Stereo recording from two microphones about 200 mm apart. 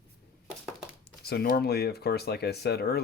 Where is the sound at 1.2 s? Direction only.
50° left (ahead or behind).